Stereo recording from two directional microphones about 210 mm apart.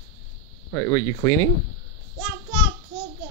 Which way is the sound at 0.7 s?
20° left (ahead or behind).